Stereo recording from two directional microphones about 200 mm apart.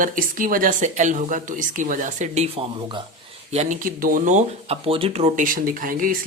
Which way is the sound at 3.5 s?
35° right (ahead or behind).